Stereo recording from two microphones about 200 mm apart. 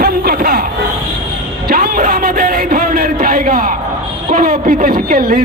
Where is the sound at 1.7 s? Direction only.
45° right (ahead or behind).